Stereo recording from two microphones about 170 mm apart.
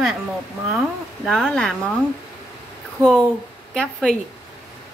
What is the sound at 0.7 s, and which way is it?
A woman's voice, centre (ahead or behind).